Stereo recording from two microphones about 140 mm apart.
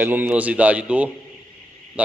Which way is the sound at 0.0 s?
15° right (ahead or behind).